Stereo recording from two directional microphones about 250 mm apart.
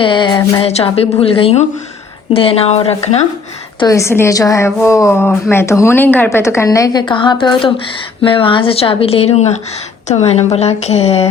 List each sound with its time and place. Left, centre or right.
0.0 s a woman's voice: centre
3.8 s a woman's voice: centre